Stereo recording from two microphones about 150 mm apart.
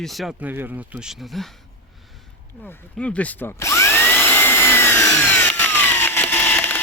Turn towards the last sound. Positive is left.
turn(degrees=15)  # may be behind; listen again after turning